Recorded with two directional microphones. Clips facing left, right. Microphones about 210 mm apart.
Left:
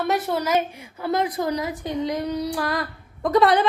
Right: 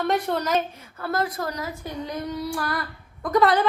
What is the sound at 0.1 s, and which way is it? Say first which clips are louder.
A woman's voice: left 2 dB; 10° left (ahead or behind).